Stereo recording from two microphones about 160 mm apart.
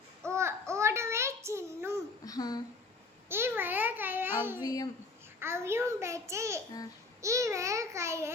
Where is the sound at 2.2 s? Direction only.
25° left (ahead or behind).